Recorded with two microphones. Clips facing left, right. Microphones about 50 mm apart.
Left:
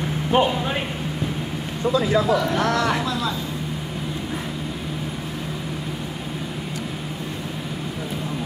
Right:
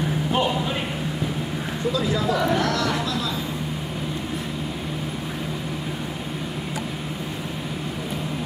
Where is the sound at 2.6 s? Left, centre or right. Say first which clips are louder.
Left 2 dB; left.